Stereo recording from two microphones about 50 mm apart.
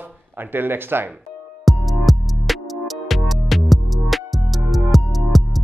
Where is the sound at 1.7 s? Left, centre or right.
Centre.